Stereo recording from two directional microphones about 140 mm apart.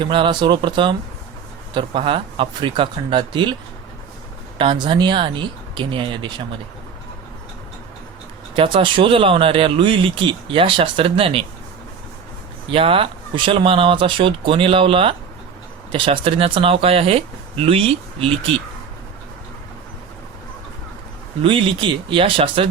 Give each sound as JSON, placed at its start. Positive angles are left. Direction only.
{"t": 0.0, "sound": "speech", "side_deg": -35}
{"t": 4.5, "sound": "speech", "side_deg": -35}
{"t": 8.5, "sound": "speech", "side_deg": -40}
{"t": 12.7, "sound": "speech", "side_deg": -40}
{"t": 21.4, "sound": "speech", "side_deg": -40}